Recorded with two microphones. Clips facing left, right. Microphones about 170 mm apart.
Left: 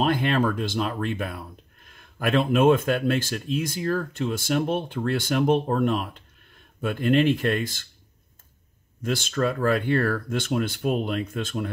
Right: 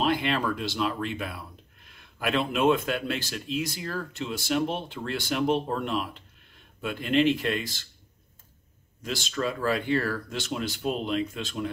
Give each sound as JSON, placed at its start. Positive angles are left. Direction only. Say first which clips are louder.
{"t": 0.0, "sound": "speech", "louder": "left 4 dB", "side_deg": 50}
{"t": 9.0, "sound": "speech", "louder": "left 5 dB", "side_deg": 50}